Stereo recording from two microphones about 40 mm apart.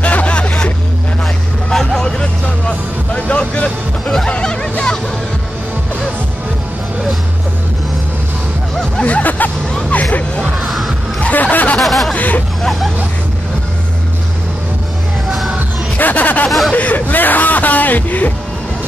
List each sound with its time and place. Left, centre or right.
0.0 s hubbub: left
1.7 s vehicle: centre
3.1 s music: left
4.3 s hubbub: left
9.0 s hubbub: left
9.8 s music: left
10.6 s music: centre
11.3 s a sound: left
11.8 s snicker: centre
12.2 s hubbub: left
16.0 s music: left
16.4 s hubbub: centre
16.7 s music: left